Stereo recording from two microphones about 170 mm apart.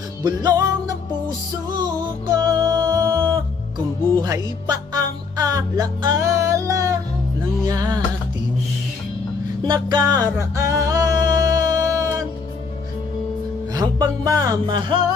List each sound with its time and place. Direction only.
0.3 s music: 25° right (ahead or behind)
1.7 s music: 25° right (ahead or behind)
9.6 s music: 25° right (ahead or behind)
13.7 s speech: 20° right (ahead or behind)